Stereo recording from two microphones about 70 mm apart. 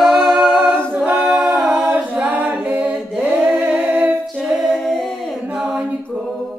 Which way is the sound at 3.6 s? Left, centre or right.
Right.